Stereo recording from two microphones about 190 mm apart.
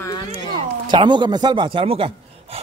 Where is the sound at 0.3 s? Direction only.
25° right (ahead or behind).